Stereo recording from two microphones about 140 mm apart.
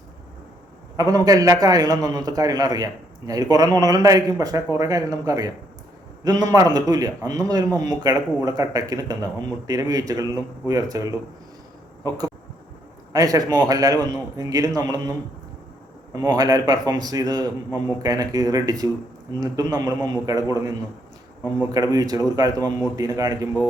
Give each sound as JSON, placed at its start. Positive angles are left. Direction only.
{"t": 0.9, "sound": "a man's voice", "side_deg": -25}
{"t": 13.1, "sound": "a man's voice", "side_deg": -25}
{"t": 16.1, "sound": "a man's voice", "side_deg": -30}